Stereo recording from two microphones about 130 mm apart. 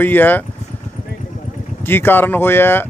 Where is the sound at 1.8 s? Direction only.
15° left (ahead or behind).